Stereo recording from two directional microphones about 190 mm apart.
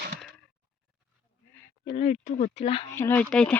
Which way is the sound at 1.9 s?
35° left (ahead or behind).